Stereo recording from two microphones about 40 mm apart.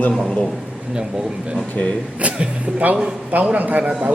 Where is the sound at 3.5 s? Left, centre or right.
Right.